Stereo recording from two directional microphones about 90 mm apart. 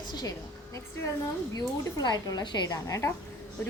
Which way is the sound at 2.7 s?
35° left (ahead or behind).